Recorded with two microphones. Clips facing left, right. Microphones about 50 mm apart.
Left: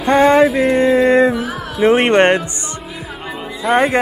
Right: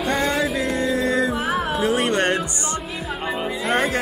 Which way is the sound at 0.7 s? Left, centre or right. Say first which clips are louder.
Left 10 dB; left.